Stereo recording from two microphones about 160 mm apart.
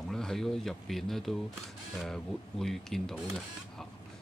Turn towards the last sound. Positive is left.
turn(degrees=0)  # may be behind; listen again after turning